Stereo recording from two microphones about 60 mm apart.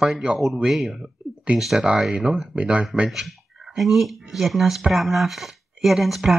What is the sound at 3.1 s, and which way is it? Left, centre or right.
Speech, centre.